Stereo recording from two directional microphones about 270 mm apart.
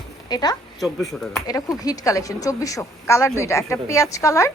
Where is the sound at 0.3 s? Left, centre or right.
Centre.